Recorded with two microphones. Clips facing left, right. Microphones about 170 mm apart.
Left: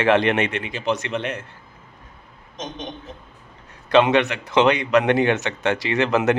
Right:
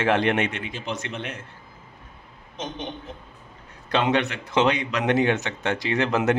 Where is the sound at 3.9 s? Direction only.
85° left.